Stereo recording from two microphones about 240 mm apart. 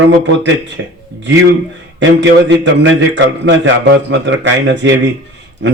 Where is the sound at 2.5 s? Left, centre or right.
Right.